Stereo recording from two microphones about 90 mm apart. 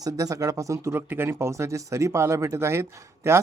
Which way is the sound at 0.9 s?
25° right (ahead or behind).